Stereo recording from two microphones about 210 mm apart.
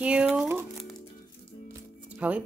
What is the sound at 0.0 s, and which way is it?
Crumpling, 5° right (ahead or behind).